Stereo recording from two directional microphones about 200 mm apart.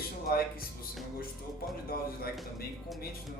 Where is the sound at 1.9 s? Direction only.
50° left (ahead or behind).